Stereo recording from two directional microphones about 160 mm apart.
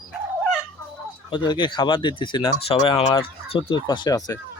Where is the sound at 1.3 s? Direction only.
30° left (ahead or behind).